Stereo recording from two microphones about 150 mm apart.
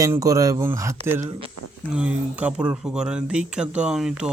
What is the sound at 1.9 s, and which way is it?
Speech, 10° right (ahead or behind).